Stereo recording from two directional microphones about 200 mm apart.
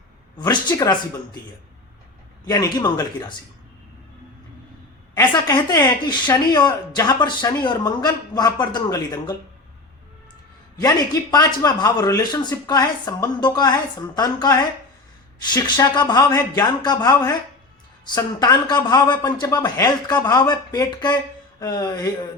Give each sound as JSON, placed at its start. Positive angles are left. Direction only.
{"t": 0.3, "sound": "speech", "side_deg": 20}
{"t": 2.5, "sound": "speech", "side_deg": 20}
{"t": 5.1, "sound": "speech", "side_deg": 20}
{"t": 10.8, "sound": "speech", "side_deg": 15}